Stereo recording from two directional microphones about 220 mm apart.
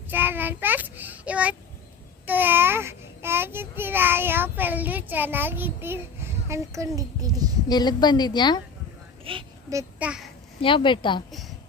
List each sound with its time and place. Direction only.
0.1 s child singing: 10° right (ahead or behind)
2.2 s babbling: 10° right (ahead or behind)
6.5 s a child's voice: 15° right (ahead or behind)
7.7 s a woman's voice: 20° left (ahead or behind)
9.2 s a sound: 20° right (ahead or behind)
10.6 s a woman's voice: 25° left (ahead or behind)